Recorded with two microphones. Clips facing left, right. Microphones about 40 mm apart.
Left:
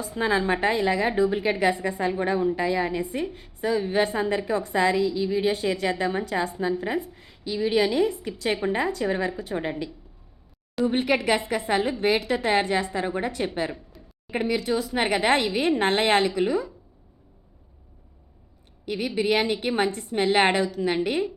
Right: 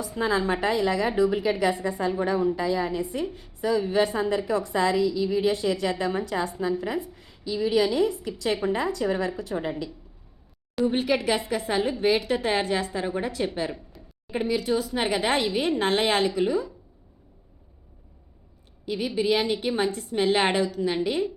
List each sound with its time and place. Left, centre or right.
0.2 s a woman's voice: left
13.7 s a sound: centre
14.5 s a woman's voice: left
18.9 s a woman's voice: left